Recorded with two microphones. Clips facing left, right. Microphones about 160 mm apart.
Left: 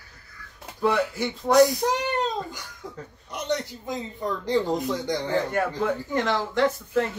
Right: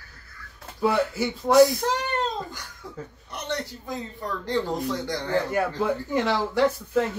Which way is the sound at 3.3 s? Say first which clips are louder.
Left 3 dB; 15° left (ahead or behind).